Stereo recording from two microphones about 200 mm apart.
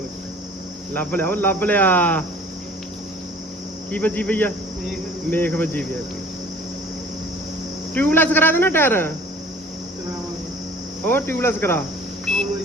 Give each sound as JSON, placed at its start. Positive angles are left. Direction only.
{"t": 0.9, "sound": "speech", "side_deg": 10}
{"t": 3.9, "sound": "speech", "side_deg": 5}
{"t": 7.9, "sound": "speech", "side_deg": 10}
{"t": 11.0, "sound": "speech", "side_deg": 10}